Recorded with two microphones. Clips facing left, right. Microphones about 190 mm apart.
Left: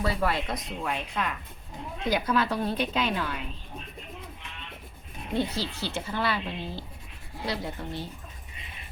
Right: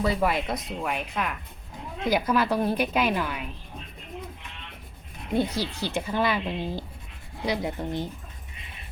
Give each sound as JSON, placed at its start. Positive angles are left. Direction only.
{"t": 0.0, "sound": "a woman's voice", "side_deg": -15}
{"t": 5.5, "sound": "a woman's voice", "side_deg": -15}